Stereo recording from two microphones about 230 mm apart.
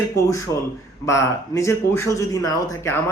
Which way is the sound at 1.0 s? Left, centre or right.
Centre.